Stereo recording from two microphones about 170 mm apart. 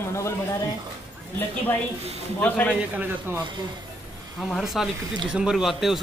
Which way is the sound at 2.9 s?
10° right (ahead or behind).